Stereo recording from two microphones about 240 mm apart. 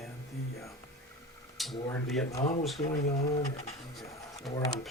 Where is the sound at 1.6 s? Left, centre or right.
Centre.